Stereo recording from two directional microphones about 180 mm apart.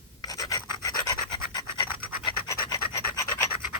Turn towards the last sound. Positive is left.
turn(degrees=20)  # may be behind; listen again after turning